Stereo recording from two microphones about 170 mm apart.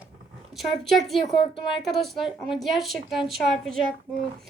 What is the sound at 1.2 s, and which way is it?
Speech, 30° left (ahead or behind).